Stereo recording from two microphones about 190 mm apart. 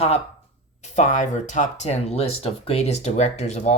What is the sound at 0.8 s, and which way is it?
Speech, 40° left (ahead or behind).